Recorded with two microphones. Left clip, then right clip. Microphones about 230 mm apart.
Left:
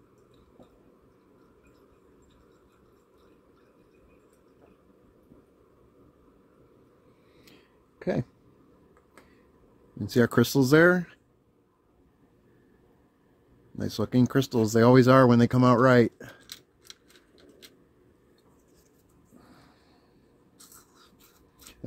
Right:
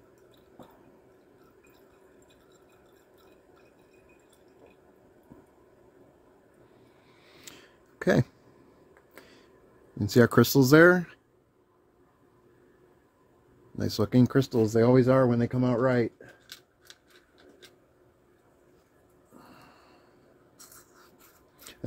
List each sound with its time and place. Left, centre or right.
7.5 s a sound: right
8.0 s speech: right
9.9 s speech: centre
13.7 s speech: centre
14.9 s speech: left